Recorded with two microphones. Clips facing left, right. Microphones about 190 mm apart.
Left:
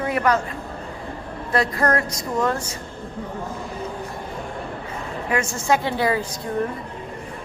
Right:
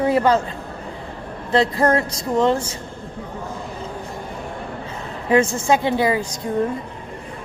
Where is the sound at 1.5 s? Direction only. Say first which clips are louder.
Right 4 dB; 25° right (ahead or behind).